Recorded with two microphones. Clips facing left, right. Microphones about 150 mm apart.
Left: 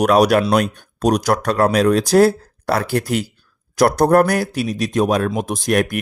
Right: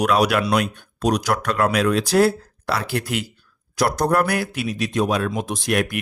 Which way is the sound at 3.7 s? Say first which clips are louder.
Left 6 dB; 50° left (ahead or behind).